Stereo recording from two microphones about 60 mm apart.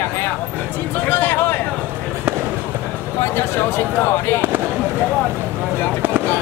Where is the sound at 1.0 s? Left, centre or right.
Left.